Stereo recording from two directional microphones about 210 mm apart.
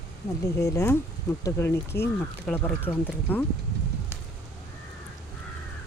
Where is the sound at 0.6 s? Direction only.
15° left (ahead or behind).